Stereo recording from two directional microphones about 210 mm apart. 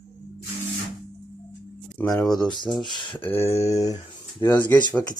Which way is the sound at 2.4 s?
20° left (ahead or behind).